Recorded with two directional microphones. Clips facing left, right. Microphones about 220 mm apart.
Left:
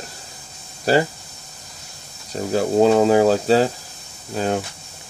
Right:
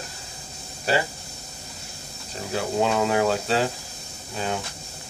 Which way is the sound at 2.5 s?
35° left (ahead or behind).